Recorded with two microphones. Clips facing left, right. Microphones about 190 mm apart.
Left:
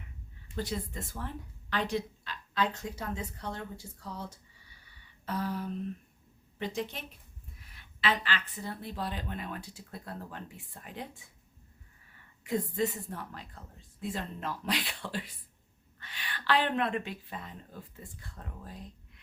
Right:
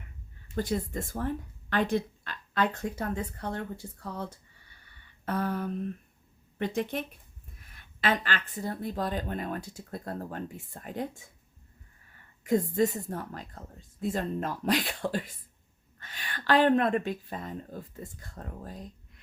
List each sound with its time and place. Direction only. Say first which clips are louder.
0.4 s speech: right 5 dB; 50° right (ahead or behind)
4.9 s a sound: right 4 dB; 55° right (ahead or behind)
6.6 s speech: right 5 dB; 55° right (ahead or behind)
12.5 s speech: right 6 dB; 45° right (ahead or behind)